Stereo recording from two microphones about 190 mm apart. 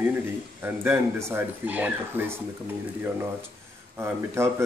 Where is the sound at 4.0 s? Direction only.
15° right (ahead or behind).